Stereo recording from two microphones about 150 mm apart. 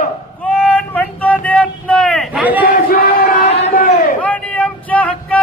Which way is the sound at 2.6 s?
70° left (ahead or behind).